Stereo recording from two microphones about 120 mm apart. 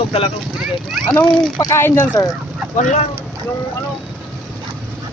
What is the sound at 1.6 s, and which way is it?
Speech, 25° left (ahead or behind).